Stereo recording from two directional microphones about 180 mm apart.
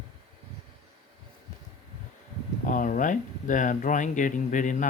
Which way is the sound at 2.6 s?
45° left (ahead or behind).